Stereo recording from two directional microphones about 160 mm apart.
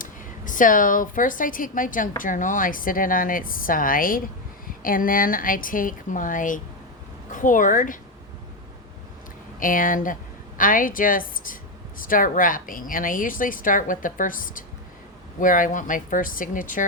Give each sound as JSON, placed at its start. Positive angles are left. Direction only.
{"t": 0.0, "sound": "a woman's voice", "side_deg": 55}
{"t": 9.6, "sound": "a woman's voice", "side_deg": 60}